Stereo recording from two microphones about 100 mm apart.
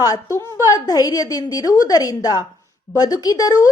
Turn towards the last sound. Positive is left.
turn(degrees=35)  # may be behind; listen again after turning